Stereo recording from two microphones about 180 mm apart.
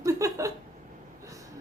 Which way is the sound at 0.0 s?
20° right (ahead or behind).